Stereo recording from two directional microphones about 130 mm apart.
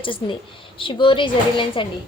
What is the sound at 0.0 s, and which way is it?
A woman's voice, 40° left (ahead or behind).